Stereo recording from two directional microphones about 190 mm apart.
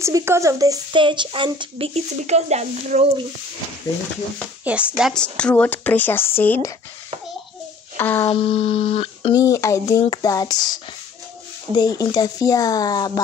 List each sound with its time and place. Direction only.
0.0 s a woman's voice: 15° right (ahead or behind); by 3.1 s 35° right (ahead or behind)
4.6 s speech: 5° right (ahead or behind); by 6.7 s 10° left (ahead or behind)
8.0 s speech: 10° left (ahead or behind)
8.3 s speech: 30° left (ahead or behind)
9.3 s speech: 15° left (ahead or behind)